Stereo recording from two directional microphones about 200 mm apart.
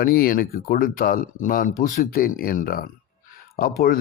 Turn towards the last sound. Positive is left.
turn(degrees=45)  # may be behind; listen again after turning